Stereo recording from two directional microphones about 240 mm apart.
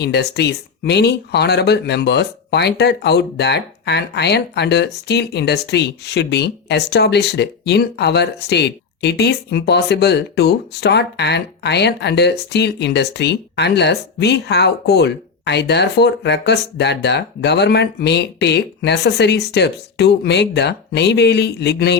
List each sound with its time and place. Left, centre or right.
0.0 s speech: left